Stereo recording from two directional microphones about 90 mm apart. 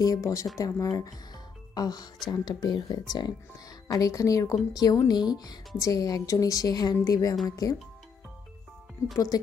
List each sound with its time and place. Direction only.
0.0 s a woman's voice: 40° left (ahead or behind)
9.3 s speech: 45° left (ahead or behind)